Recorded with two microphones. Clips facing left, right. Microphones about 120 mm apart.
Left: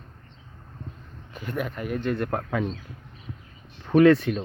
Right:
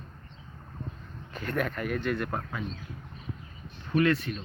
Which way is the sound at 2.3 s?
60° left (ahead or behind).